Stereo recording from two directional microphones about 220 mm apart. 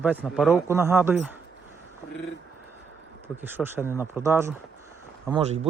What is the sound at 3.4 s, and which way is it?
Speech, 10° right (ahead or behind).